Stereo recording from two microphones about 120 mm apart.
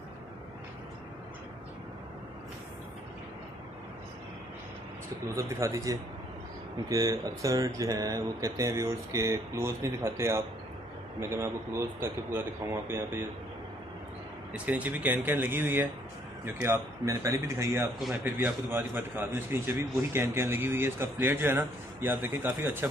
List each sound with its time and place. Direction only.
5.3 s speech: 25° right (ahead or behind)
14.5 s a man's voice: 15° right (ahead or behind)